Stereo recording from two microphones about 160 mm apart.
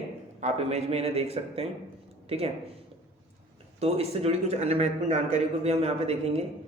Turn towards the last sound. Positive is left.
turn(degrees=-40)  # may be behind; listen again after turning